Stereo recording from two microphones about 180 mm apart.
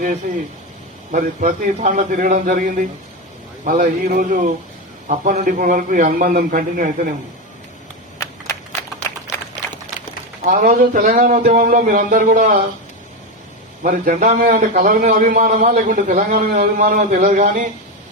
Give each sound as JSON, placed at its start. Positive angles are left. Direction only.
{"t": 0.2, "sound": "a man's voice", "side_deg": -50}
{"t": 10.4, "sound": "a man's voice", "side_deg": -50}
{"t": 13.8, "sound": "a man's voice", "side_deg": -50}